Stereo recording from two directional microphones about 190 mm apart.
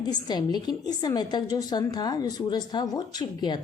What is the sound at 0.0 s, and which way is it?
A woman's voice, 20° left (ahead or behind).